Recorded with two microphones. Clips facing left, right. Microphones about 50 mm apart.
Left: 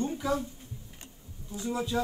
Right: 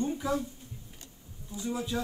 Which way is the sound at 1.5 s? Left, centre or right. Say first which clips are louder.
Left 1 dB; left.